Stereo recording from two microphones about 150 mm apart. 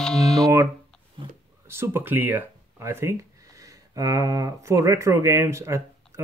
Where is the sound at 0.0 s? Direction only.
5° left (ahead or behind).